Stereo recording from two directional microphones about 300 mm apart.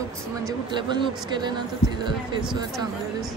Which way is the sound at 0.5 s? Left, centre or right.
Centre.